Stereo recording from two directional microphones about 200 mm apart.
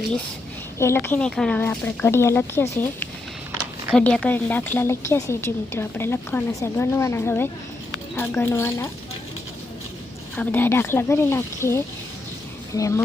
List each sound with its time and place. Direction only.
0.8 s a woman's voice: 10° left (ahead or behind)
10.3 s a woman's voice: 10° left (ahead or behind)